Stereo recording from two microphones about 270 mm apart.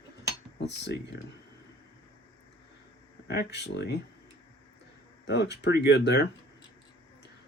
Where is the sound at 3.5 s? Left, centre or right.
Left.